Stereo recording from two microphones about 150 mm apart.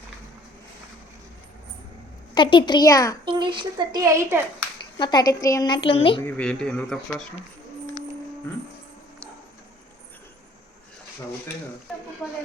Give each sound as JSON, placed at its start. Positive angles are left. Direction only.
{"t": 2.3, "sound": "a woman's voice", "side_deg": 30}
{"t": 3.2, "sound": "speech", "side_deg": -30}
{"t": 4.9, "sound": "a woman's voice", "side_deg": 30}
{"t": 6.2, "sound": "speech", "side_deg": 10}